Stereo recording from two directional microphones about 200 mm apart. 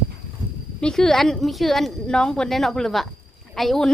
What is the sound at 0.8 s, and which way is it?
A woman's voice, centre (ahead or behind).